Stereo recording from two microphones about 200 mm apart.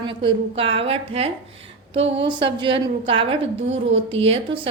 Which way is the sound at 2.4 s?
60° right (ahead or behind).